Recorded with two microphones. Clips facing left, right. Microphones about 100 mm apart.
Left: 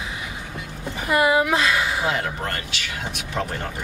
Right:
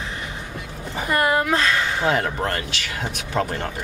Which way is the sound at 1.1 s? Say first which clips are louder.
Left 1 dB; 5° left (ahead or behind).